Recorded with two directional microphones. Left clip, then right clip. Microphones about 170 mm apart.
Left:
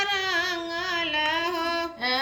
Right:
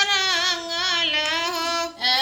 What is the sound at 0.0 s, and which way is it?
Music, 5° right (ahead or behind).